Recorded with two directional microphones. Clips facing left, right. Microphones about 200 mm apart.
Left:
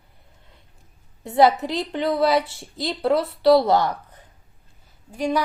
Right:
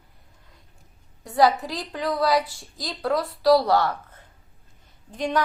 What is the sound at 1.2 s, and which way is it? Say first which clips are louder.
A woman's voice: left 3 dB; 25° left (ahead or behind).